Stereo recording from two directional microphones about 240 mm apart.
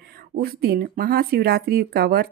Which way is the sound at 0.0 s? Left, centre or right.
Right.